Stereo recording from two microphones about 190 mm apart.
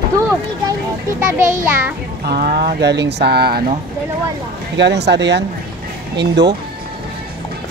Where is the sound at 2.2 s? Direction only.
55° right (ahead or behind).